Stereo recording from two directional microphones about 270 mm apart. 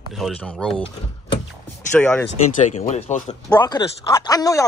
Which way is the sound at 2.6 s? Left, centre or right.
Left.